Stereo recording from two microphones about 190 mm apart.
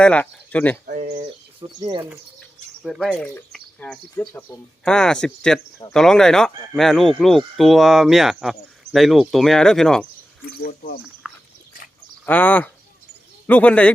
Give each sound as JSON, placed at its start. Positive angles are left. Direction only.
{"t": 0.0, "sound": "speech", "side_deg": 5}
{"t": 0.9, "sound": "speech", "side_deg": -40}
{"t": 1.6, "sound": "speech", "side_deg": -20}
{"t": 2.8, "sound": "speech", "side_deg": 0}
{"t": 10.4, "sound": "speech", "side_deg": 50}
{"t": 11.2, "sound": "dog", "side_deg": -5}
{"t": 12.2, "sound": "speech", "side_deg": 10}